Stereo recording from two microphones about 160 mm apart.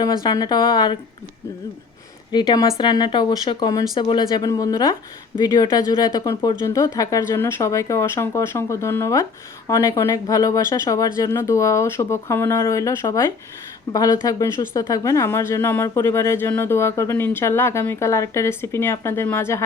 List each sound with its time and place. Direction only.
0.0 s speech: 25° left (ahead or behind)
2.3 s speech: 25° left (ahead or behind)